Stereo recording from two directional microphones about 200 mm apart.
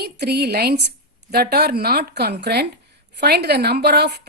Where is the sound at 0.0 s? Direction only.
55° right (ahead or behind).